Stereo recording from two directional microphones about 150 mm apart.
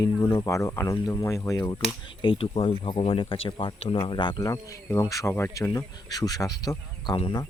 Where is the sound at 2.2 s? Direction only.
35° left (ahead or behind).